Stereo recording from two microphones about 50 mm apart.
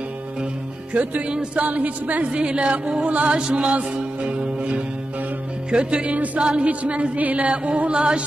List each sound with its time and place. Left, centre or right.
0.9 s speech: right
6.0 s music: right
6.4 s speech: right